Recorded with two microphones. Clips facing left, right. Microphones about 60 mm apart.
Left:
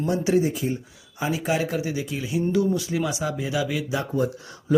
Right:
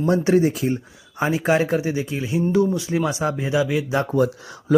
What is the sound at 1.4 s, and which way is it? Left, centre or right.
Speech, right.